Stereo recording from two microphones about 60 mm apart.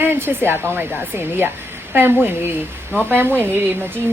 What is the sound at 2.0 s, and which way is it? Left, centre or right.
A woman's voice, right.